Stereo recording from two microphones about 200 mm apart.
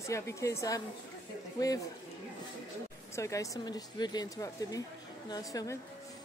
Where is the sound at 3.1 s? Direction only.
15° left (ahead or behind).